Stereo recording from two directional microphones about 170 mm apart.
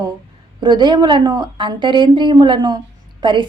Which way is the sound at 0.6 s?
25° right (ahead or behind).